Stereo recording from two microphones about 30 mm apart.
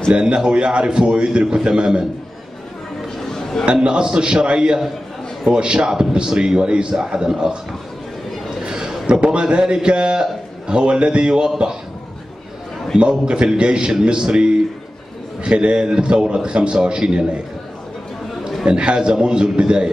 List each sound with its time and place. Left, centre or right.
0.1 s a man's voice: right
3.2 s chatter: centre
3.8 s a man's voice: right
5.8 s a man's voice: right
8.6 s a sound: right
9.0 s a man's voice: right
9.6 s a man's voice: right
13.1 s a man's voice: right
18.7 s a man's voice: right
18.9 s a man's voice: right